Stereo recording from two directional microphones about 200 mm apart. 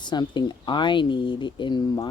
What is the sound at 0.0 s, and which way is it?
Speech, 20° left (ahead or behind).